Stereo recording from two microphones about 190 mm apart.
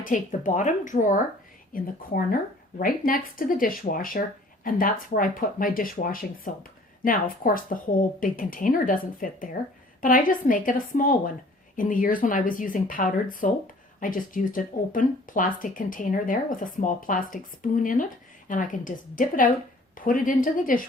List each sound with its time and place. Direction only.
0.0 s speech: 45° left (ahead or behind)